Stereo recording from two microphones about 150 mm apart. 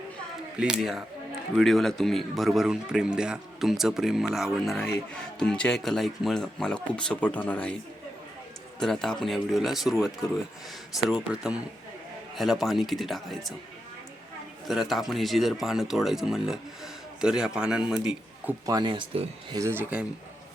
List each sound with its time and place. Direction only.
0.6 s speech: 5° right (ahead or behind)
8.8 s speech: 5° left (ahead or behind)
11.3 s a man's voice: 5° right (ahead or behind)
14.7 s speech: centre (ahead or behind)
18.6 s speech: 25° right (ahead or behind)
19.5 s speech: 20° right (ahead or behind)